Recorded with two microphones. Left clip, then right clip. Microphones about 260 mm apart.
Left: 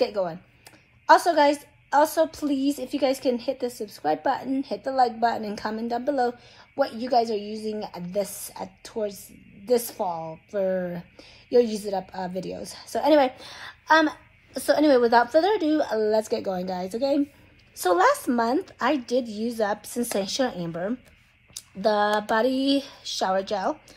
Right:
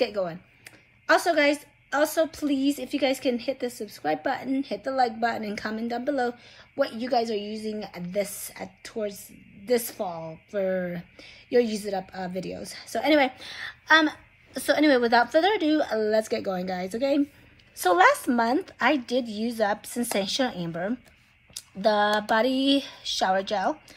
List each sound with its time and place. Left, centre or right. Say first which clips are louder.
0.0 s a woman's voice: left 2 dB; centre
20.7 s speech: left 1 dB; centre
21.5 s a woman's voice: even; centre